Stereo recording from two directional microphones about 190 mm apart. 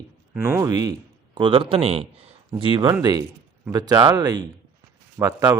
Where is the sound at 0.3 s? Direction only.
10° right (ahead or behind).